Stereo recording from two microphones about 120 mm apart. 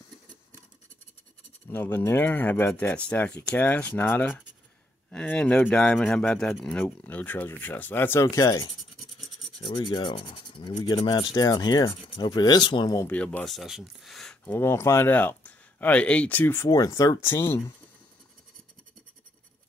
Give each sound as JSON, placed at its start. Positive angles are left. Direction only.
{"t": 1.7, "sound": "speech", "side_deg": 20}
{"t": 13.1, "sound": "speech", "side_deg": 10}
{"t": 14.4, "sound": "speech", "side_deg": 20}
{"t": 16.6, "sound": "speech", "side_deg": 30}